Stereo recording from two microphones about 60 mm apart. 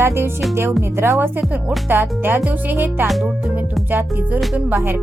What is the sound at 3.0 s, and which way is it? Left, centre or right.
Speech, centre.